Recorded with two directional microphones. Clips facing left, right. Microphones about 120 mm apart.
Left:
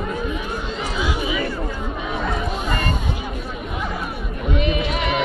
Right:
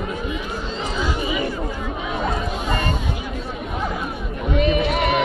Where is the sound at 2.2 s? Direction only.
20° right (ahead or behind).